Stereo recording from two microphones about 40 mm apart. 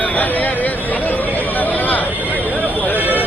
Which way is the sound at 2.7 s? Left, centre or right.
Left.